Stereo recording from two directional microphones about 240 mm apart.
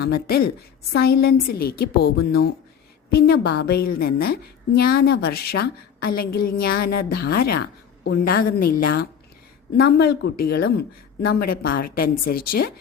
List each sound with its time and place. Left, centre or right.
0.9 s a woman's voice: left